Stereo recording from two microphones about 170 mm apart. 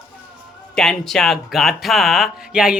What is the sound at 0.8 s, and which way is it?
Speech, 5° left (ahead or behind).